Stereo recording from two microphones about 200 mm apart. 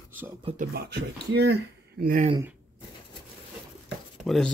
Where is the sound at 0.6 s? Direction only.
50° right (ahead or behind).